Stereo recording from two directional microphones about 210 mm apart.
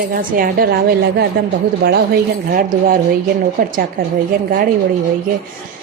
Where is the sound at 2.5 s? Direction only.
45° right (ahead or behind).